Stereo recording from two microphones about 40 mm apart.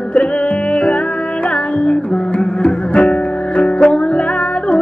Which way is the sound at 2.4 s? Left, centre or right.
Left.